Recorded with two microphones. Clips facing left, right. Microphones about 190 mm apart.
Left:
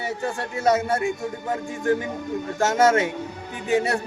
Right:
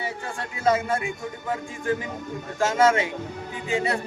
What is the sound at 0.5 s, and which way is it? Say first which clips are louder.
Speech: left 1 dB; 40° left (ahead or behind).